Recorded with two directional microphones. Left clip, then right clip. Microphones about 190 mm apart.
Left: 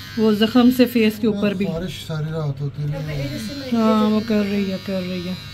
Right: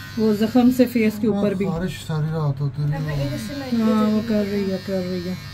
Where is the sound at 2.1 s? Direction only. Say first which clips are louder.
Right 1 dB; 15° right (ahead or behind).